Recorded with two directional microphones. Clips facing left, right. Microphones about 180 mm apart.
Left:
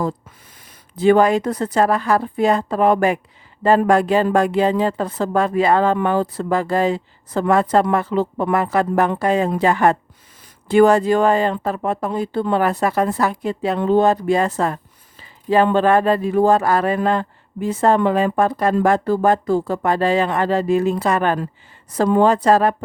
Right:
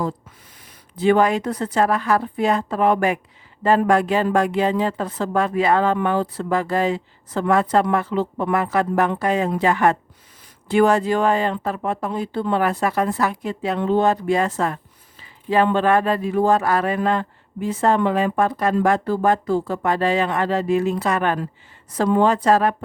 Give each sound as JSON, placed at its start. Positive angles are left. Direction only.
{"t": 0.9, "sound": "a woman's voice", "side_deg": 40}